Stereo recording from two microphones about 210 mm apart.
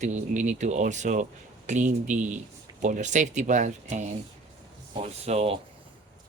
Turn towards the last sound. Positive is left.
turn(degrees=-30)  # may be behind; listen again after turning